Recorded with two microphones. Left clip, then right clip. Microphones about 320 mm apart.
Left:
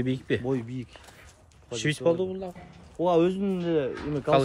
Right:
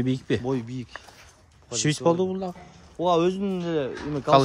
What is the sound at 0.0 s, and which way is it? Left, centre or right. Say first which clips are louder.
Speech: right 2 dB; centre.